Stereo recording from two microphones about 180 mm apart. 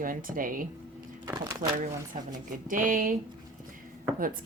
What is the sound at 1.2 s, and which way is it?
Speech, 20° right (ahead or behind).